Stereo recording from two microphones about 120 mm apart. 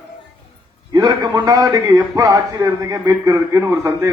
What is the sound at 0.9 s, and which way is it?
A man's voice, 35° right (ahead or behind).